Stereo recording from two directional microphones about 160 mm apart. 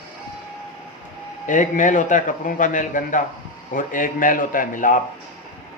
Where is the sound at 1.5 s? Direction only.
55° left (ahead or behind).